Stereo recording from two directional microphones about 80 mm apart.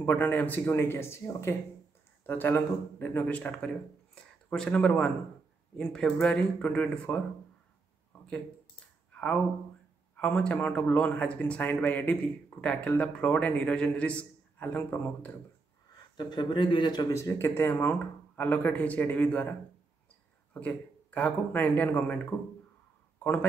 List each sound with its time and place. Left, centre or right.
0.0 s speech: left
8.1 s a sound: centre
10.1 s speech: centre
16.2 s speech: left
17.1 s speech: left
20.5 s speech: centre
23.1 s a sound: centre